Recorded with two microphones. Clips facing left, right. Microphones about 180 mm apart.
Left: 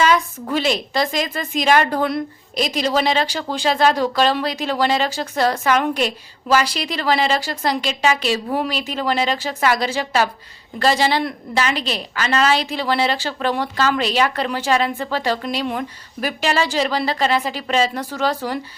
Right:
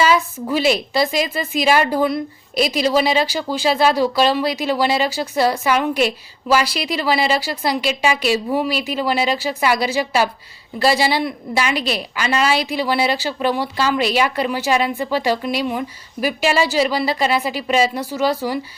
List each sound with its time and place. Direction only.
0.0 s a woman's voice: 5° right (ahead or behind)